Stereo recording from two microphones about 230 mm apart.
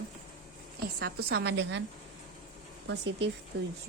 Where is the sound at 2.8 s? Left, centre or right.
Right.